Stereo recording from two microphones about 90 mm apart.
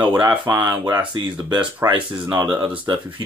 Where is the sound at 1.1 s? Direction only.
55° right (ahead or behind).